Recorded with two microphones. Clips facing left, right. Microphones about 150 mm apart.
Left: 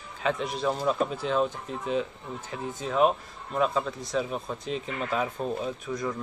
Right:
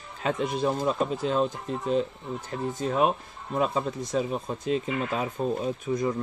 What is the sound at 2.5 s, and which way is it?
Speech, 45° right (ahead or behind).